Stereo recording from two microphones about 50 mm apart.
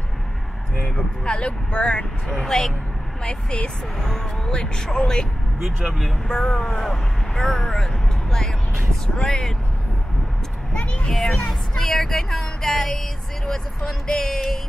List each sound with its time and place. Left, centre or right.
1.2 s speech: centre
5.9 s speech: centre
6.2 s speech: centre
6.8 s speech: centre
10.7 s a child's voice: left
11.1 s speech: centre